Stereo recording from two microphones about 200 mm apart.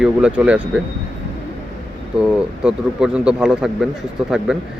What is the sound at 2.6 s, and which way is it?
Speech, 5° right (ahead or behind).